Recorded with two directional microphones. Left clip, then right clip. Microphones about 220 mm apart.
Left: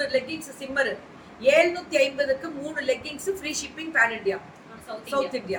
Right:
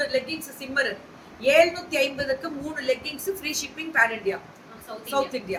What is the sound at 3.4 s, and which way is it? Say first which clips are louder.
Speech: right 1 dB; 10° right (ahead or behind).